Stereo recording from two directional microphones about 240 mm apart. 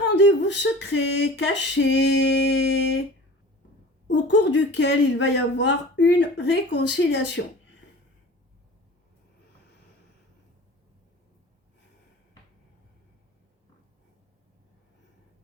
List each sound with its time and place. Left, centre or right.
0.2 s speech: left
4.1 s speech: left